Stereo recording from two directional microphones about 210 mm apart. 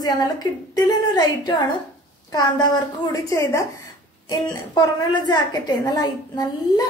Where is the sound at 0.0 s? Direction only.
20° left (ahead or behind).